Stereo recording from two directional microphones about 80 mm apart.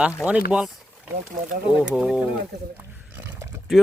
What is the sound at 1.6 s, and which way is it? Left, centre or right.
Speech, centre.